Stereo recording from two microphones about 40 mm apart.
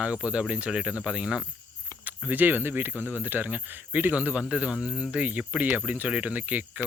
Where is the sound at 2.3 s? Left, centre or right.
Right.